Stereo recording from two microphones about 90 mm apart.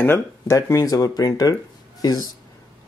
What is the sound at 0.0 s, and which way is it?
Speech, 30° left (ahead or behind).